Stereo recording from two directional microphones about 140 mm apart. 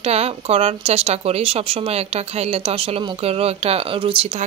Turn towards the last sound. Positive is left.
turn(degrees=-40)  # may be behind; listen again after turning